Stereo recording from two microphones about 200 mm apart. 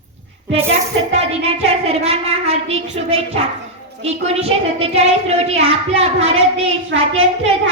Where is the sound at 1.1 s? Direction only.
30° right (ahead or behind).